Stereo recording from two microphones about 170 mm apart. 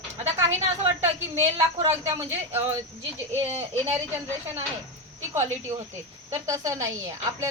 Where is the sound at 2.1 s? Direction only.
15° right (ahead or behind).